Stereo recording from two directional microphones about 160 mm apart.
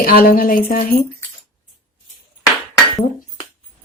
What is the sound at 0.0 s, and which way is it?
Speech, 70° left (ahead or behind).